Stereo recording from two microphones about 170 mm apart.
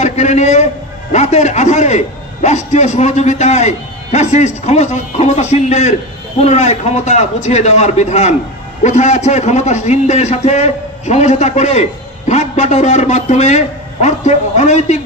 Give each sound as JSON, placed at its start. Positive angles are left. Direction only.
{"t": 0.0, "sound": "a man's voice", "side_deg": 45}